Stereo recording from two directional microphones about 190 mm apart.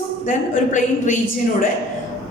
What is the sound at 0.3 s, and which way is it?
Speech, 40° left (ahead or behind).